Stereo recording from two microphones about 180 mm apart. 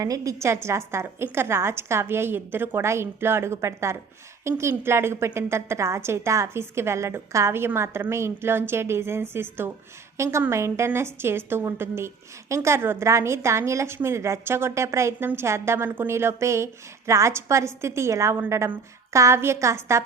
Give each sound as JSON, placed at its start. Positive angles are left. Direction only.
{"t": 0.0, "sound": "a woman's voice", "side_deg": -20}